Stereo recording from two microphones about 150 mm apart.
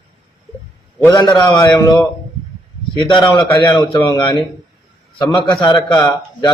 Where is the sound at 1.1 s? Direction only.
25° left (ahead or behind).